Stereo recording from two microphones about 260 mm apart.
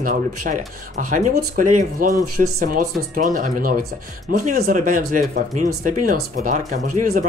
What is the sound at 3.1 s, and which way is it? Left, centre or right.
Speech, right.